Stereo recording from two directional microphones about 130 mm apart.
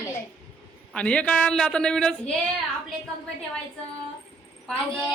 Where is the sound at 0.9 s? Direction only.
10° left (ahead or behind).